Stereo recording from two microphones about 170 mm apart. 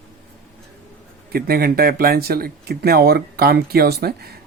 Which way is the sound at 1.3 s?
65° right (ahead or behind).